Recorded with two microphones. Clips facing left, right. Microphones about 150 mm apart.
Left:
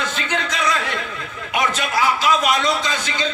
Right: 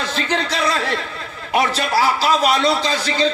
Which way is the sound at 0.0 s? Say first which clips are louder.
Right 3 dB; 35° right (ahead or behind).